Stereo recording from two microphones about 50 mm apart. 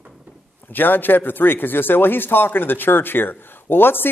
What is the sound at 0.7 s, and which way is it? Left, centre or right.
A man's voice, left.